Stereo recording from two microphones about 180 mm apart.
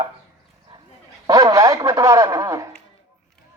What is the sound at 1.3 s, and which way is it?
Speech, 20° right (ahead or behind).